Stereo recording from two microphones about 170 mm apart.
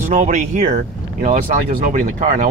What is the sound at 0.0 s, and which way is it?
Speech, 45° right (ahead or behind).